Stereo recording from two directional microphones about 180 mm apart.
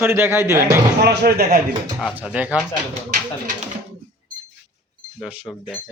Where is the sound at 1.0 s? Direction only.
65° right (ahead or behind).